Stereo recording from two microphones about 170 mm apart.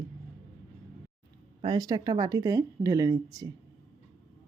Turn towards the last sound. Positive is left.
turn(degrees=-20)  # may be behind; listen again after turning